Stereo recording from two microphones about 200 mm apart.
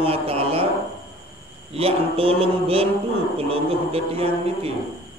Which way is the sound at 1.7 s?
30° right (ahead or behind).